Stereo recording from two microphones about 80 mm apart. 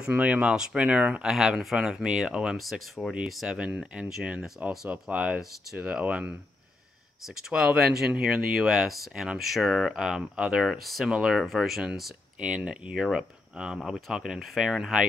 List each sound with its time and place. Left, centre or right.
0.1 s speech: centre
1.3 s speech: centre
7.4 s speech: centre